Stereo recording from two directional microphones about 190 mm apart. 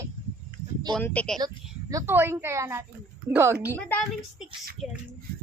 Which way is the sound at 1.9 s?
15° right (ahead or behind).